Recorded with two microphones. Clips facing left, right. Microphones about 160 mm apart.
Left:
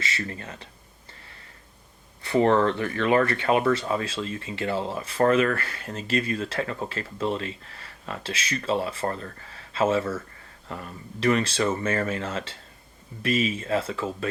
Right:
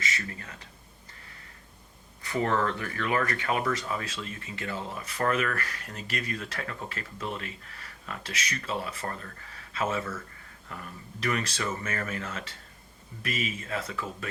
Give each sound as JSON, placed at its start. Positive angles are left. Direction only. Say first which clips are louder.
{"t": 0.0, "sound": "speech", "louder": "left 3 dB", "side_deg": 30}
{"t": 2.2, "sound": "speech", "louder": "left 7 dB", "side_deg": 30}